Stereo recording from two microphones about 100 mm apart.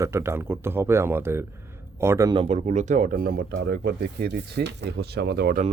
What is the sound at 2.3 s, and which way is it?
Speech, 80° right.